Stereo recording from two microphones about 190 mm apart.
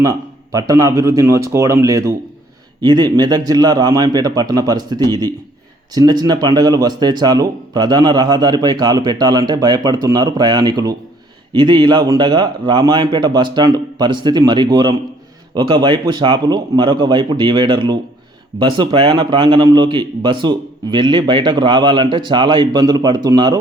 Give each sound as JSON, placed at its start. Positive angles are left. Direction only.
{"t": 0.0, "sound": "speech", "side_deg": -15}